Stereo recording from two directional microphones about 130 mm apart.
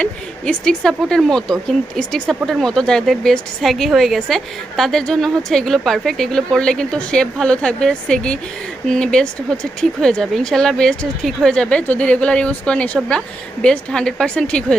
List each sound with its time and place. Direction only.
0.0 s a woman's voice: 5° left (ahead or behind)